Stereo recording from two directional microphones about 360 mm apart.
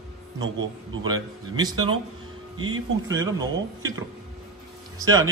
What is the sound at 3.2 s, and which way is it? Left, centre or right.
Speech, centre.